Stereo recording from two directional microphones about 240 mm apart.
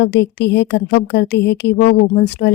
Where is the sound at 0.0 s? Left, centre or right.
Left.